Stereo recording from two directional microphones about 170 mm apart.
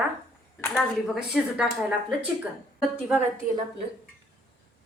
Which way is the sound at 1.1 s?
5° right (ahead or behind).